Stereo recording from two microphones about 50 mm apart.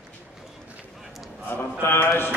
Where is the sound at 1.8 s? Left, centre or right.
Left.